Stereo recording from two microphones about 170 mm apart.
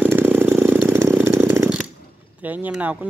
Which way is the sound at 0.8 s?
15° right (ahead or behind).